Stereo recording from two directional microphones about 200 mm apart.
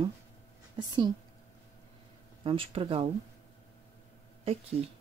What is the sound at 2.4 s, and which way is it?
Speech, 25° right (ahead or behind).